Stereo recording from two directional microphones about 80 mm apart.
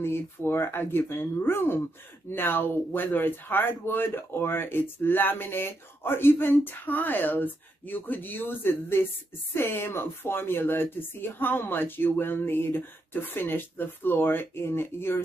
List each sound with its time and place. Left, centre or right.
0.0 s speech: left